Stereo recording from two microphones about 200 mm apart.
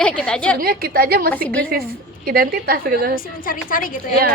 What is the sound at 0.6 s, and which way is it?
Speech, 45° right (ahead or behind).